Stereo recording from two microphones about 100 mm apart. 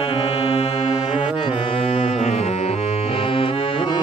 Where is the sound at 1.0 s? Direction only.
55° left (ahead or behind).